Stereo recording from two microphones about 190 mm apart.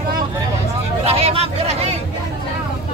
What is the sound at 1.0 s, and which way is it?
Hubbub, 30° right (ahead or behind).